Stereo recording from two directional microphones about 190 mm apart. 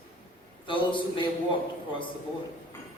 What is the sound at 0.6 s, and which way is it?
Speech, 25° left (ahead or behind).